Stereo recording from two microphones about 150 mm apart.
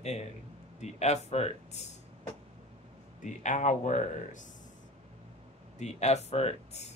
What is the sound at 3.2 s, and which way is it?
Speech, 55° left (ahead or behind).